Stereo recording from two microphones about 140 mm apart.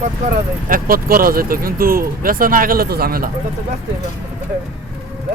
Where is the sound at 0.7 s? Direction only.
90° right.